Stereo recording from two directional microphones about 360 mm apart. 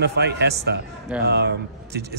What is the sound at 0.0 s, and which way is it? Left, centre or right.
Speech, right.